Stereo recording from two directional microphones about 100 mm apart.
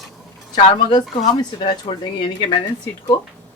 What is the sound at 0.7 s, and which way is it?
Speech, 55° left (ahead or behind).